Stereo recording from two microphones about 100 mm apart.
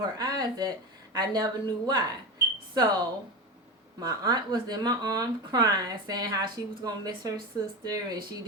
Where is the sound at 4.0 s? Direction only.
40° right (ahead or behind).